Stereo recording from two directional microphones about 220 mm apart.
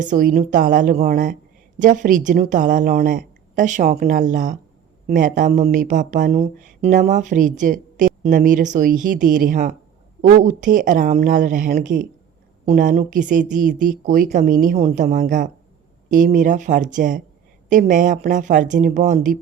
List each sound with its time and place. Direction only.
0.0 s speech: 35° right (ahead or behind)